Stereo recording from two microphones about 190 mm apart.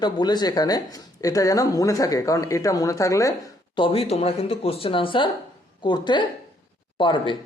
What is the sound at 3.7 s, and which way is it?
Speech, 30° left (ahead or behind).